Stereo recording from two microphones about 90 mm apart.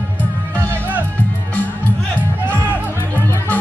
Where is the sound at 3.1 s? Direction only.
20° left (ahead or behind).